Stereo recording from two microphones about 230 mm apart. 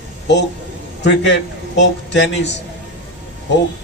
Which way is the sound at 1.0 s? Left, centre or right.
Left.